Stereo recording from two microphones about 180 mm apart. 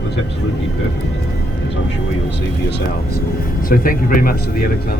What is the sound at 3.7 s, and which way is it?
Speech, 50° left (ahead or behind).